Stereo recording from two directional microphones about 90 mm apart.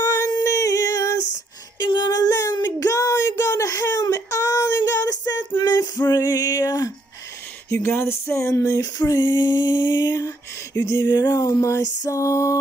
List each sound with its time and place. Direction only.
0.5 s singing: 40° left (ahead or behind)
1.8 s child singing: 55° left (ahead or behind)
5.6 s a sound: 50° left (ahead or behind)
7.7 s female singing: 30° left (ahead or behind)
10.9 s music: 50° left (ahead or behind)